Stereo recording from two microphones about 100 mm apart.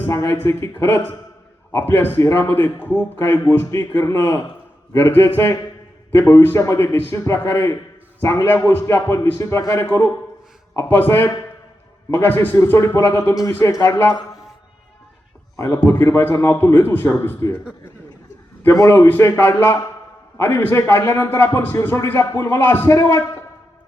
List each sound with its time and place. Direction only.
0.1 s a man's voice: 25° left (ahead or behind)
15.5 s a man's voice: 30° left (ahead or behind)
18.6 s a man's voice: 30° left (ahead or behind)